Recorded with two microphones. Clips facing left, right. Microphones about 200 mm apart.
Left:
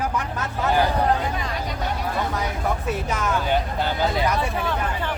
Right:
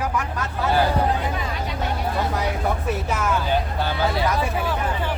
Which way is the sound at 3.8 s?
15° left (ahead or behind).